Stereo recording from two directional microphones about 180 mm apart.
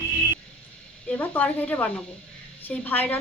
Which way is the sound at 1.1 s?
10° left (ahead or behind).